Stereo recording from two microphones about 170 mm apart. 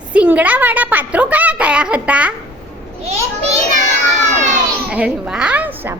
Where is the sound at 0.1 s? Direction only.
10° right (ahead or behind).